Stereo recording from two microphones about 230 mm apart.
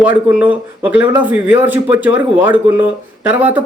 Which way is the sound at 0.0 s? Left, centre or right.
Centre.